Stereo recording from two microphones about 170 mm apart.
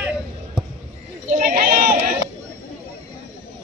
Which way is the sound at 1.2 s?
50° right (ahead or behind).